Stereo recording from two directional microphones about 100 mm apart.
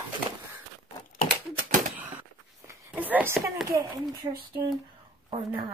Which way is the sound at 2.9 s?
15° right (ahead or behind).